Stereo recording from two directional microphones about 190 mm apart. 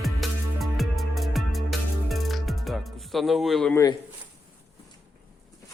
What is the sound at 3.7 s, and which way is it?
Speech, 20° left (ahead or behind).